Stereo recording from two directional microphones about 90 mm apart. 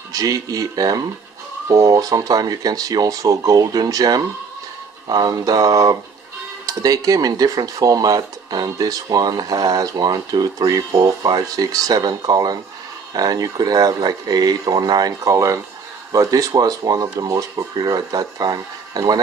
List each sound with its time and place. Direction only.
0.1 s speech: 40° right (ahead or behind)